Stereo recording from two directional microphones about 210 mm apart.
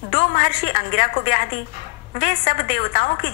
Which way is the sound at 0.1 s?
40° left (ahead or behind).